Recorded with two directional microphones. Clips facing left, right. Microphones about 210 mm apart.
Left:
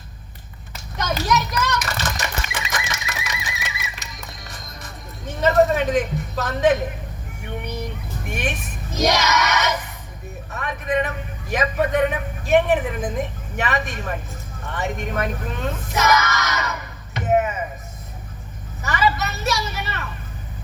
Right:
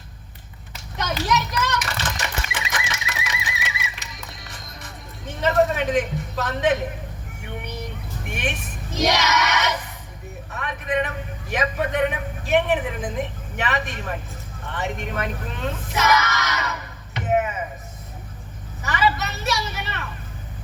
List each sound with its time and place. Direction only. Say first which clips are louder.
0.7 s children playing: left 2 dB; 40° left (ahead or behind)
8.3 s vehicle: left 2 dB; 40° left (ahead or behind)
9.0 s a sound: left 1 dB; 40° left (ahead or behind)
10.5 s a man's voice: left 2 dB; 40° left (ahead or behind)
17.2 s chop: left 2 dB; 40° left (ahead or behind)
18.8 s a sound: left 1 dB; 40° left (ahead or behind)
19.2 s vehicle: left 2 dB; 40° left (ahead or behind)